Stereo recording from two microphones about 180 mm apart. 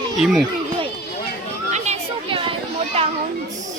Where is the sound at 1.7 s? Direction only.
40° right (ahead or behind).